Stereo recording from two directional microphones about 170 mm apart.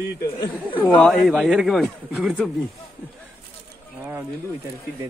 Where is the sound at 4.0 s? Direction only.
10° right (ahead or behind).